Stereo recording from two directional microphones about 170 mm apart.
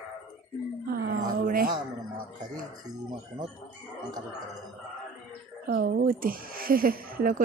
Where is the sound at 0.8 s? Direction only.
65° right (ahead or behind).